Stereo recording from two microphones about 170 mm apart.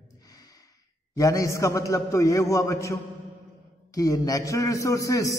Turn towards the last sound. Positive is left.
turn(degrees=20)  # may be behind; listen again after turning